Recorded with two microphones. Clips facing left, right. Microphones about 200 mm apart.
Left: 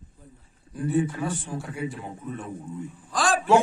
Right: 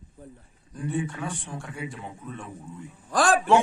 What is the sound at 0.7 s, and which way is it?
Speech, 5° left (ahead or behind).